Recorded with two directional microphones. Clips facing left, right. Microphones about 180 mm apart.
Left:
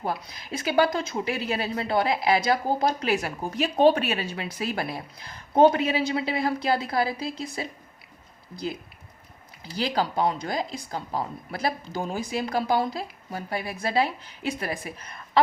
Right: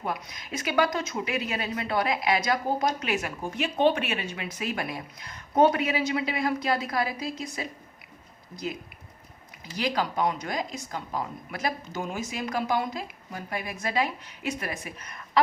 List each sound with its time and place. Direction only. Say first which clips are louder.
0.0 s speech: left 2 dB; 30° left (ahead or behind)